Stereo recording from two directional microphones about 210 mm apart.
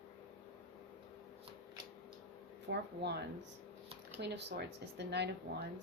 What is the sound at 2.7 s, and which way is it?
Speech, 55° right (ahead or behind).